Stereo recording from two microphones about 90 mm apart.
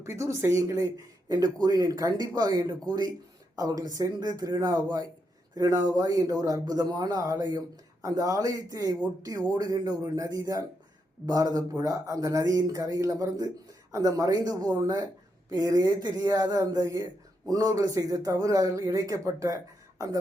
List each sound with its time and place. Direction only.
0.0 s speech: 30° right (ahead or behind)